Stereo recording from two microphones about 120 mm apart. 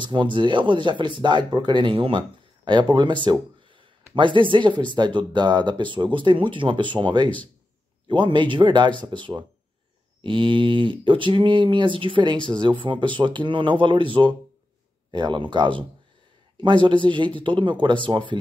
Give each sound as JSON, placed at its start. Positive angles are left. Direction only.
{"t": 0.0, "sound": "speech", "side_deg": -40}